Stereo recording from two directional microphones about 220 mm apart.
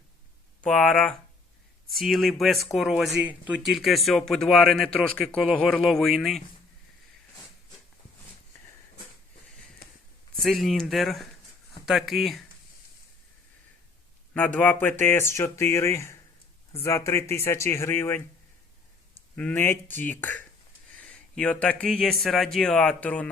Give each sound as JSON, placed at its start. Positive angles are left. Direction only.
{"t": 0.6, "sound": "speech", "side_deg": 5}
{"t": 9.8, "sound": "a sound", "side_deg": 45}
{"t": 10.3, "sound": "speech", "side_deg": 0}
{"t": 14.3, "sound": "speech", "side_deg": 5}
{"t": 19.4, "sound": "speech", "side_deg": 10}